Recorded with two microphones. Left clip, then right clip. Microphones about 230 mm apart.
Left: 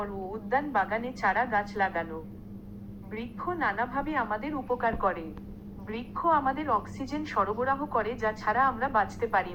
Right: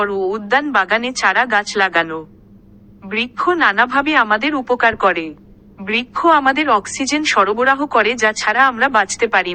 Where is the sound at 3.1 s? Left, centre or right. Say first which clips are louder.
Right 18 dB; right.